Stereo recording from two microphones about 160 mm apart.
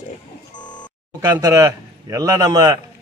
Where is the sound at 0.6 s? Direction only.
30° left (ahead or behind).